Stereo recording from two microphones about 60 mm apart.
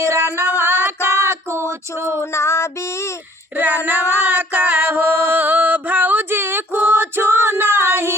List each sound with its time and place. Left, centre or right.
0.0 s music: right
0.3 s female singing: right
2.3 s music: left
3.6 s child singing: right
4.3 s music: right